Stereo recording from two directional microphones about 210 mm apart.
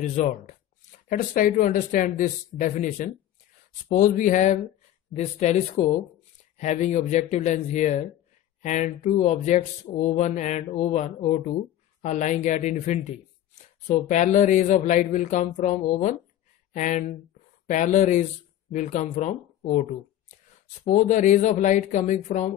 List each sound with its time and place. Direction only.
0.0 s speech: 35° left (ahead or behind)